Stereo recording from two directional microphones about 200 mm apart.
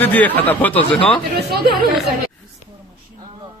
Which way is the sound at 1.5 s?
50° right (ahead or behind).